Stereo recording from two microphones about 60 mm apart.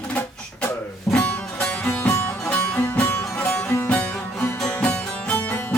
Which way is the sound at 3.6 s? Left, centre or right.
Left.